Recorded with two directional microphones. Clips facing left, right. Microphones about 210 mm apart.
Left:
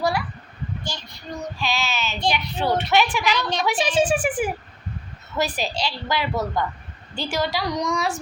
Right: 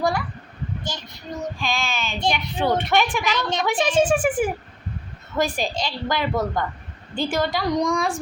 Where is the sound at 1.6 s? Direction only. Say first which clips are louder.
Left 2 dB; 50° right (ahead or behind).